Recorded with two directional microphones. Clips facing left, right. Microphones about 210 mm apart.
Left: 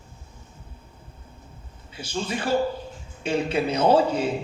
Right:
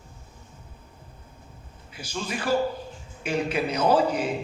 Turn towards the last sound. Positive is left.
turn(degrees=25)  # may be behind; listen again after turning